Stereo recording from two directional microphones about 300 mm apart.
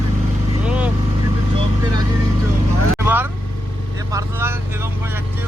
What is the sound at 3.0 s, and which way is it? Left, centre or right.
Vehicle, centre.